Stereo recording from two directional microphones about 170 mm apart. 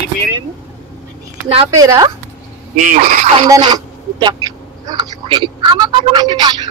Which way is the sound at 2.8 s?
50° right (ahead or behind).